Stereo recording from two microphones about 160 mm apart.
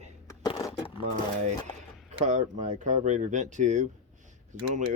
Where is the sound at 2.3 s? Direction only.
45° right (ahead or behind).